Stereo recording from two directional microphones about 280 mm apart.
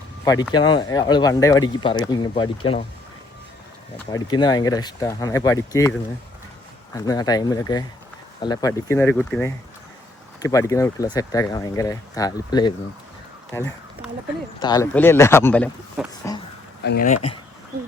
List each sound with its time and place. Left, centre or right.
0.5 s speech: centre
3.9 s speech: centre
6.9 s speech: centre
16.8 s speech: left